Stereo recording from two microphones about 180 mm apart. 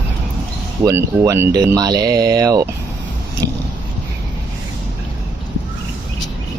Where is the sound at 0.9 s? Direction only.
15° right (ahead or behind).